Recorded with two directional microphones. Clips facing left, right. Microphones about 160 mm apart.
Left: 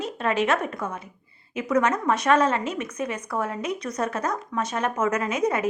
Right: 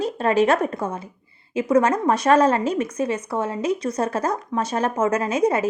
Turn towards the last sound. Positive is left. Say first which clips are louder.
# right 4 dB
turn(degrees=-30)  # may be behind; listen again after turning